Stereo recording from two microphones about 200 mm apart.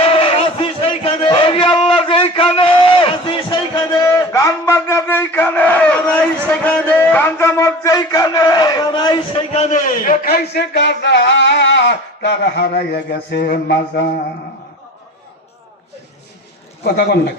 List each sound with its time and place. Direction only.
0.0 s a sound: 30° left (ahead or behind); by 6.0 s 5° left (ahead or behind)
6.5 s a man's voice: 10° left (ahead or behind)
9.5 s a man's voice: 35° left (ahead or behind); by 14.1 s 55° left (ahead or behind)
16.8 s speech: 55° left (ahead or behind)